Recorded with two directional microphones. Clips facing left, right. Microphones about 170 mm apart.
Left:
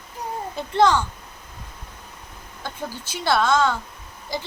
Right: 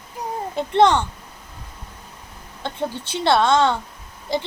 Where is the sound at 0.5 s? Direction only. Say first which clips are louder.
Right 3 dB; 25° right (ahead or behind).